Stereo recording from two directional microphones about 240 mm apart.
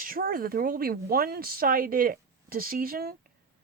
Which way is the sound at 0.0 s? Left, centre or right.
Right.